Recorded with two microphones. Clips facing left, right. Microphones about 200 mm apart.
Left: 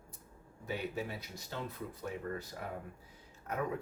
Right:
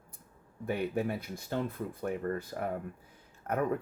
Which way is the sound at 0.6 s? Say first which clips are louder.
Right 7 dB; 55° right (ahead or behind).